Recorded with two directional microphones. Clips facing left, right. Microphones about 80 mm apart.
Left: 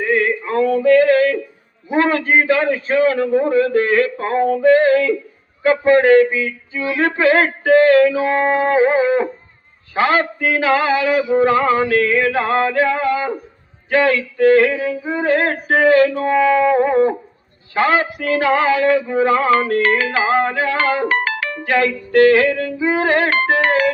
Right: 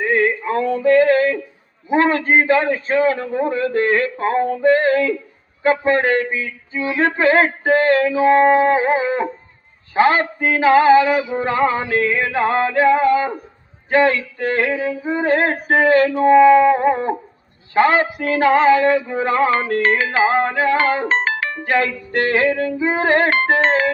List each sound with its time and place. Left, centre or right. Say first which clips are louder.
0.0 s male singing: even; right
1.9 s music: even; right